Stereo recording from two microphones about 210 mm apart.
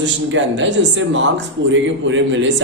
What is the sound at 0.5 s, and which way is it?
Speech, 60° right (ahead or behind).